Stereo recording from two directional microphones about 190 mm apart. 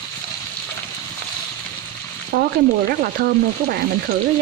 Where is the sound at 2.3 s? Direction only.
50° right (ahead or behind).